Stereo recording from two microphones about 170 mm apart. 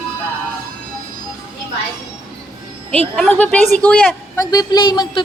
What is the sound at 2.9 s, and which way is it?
Speech, 5° left (ahead or behind).